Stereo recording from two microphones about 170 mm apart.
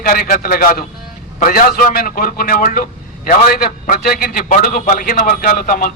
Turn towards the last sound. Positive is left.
turn(degrees=55)  # may be behind; listen again after turning